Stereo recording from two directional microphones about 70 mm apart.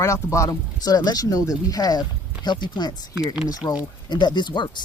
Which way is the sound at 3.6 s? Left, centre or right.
Left.